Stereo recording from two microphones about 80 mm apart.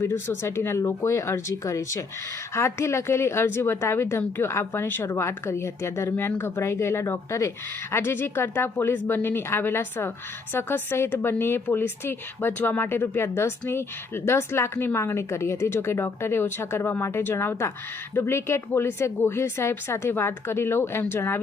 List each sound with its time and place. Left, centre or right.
0.0 s a woman's voice: left